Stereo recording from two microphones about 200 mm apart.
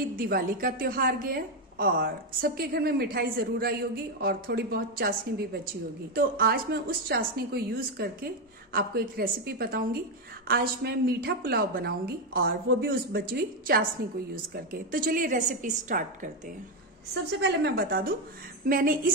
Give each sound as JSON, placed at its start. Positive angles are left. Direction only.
{"t": 0.1, "sound": "a woman's voice", "side_deg": -45}
{"t": 17.4, "sound": "a woman's voice", "side_deg": -60}